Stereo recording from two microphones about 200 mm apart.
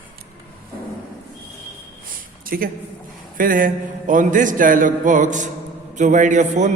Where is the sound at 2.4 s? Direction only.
45° right (ahead or behind).